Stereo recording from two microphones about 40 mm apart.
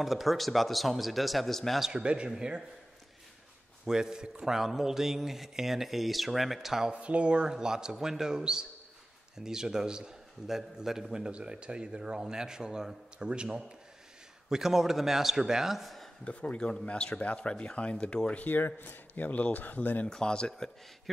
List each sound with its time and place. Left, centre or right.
0.0 s speech: centre
1.9 s a man's voice: right
3.8 s a man's voice: centre
6.9 s a man's voice: right; by 11.2 s centre
11.2 s a man's voice: right
14.5 s a man's voice: centre
16.3 s a man's voice: left
18.8 s speech: left
20.1 s a man's voice: left